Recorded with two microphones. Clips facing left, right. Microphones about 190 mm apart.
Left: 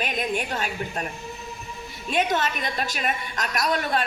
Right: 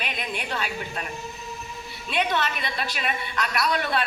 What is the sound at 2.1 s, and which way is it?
A woman's voice, 45° left (ahead or behind).